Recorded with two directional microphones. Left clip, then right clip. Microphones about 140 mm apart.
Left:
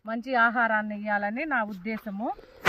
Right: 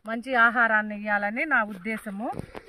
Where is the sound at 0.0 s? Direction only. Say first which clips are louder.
Right 2 dB; 20° right (ahead or behind).